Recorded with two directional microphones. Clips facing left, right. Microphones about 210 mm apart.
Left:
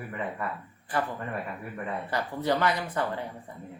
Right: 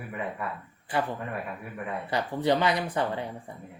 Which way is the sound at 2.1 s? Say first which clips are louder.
Right 3 dB; 20° right (ahead or behind).